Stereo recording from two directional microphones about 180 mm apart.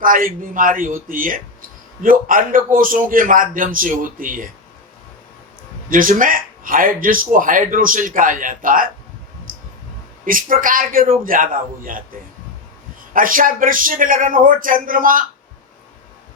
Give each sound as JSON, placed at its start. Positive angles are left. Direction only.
{"t": 0.0, "sound": "speech", "side_deg": -50}
{"t": 5.9, "sound": "speech", "side_deg": -50}
{"t": 10.2, "sound": "speech", "side_deg": -50}
{"t": 13.1, "sound": "speech", "side_deg": -50}